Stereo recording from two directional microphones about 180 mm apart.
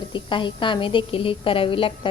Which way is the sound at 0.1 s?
25° left (ahead or behind).